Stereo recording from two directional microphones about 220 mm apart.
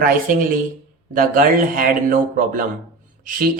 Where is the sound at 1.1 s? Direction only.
40° right (ahead or behind).